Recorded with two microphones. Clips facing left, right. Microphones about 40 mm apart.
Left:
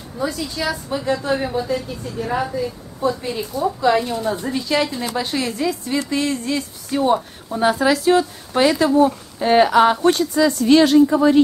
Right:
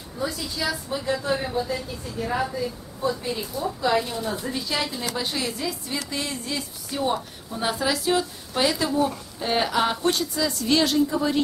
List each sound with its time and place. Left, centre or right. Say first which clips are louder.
0.3 s a woman's voice: left 4 dB; centre
0.8 s a woman's voice: left 6 dB; centre